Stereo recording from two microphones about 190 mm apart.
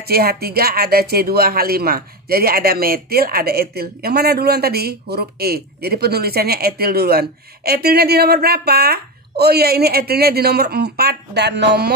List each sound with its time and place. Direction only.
0.1 s speech: 55° right (ahead or behind)